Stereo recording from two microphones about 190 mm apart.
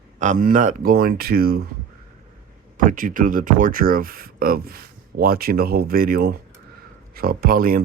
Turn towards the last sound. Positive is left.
turn(degrees=-50)  # may be behind; listen again after turning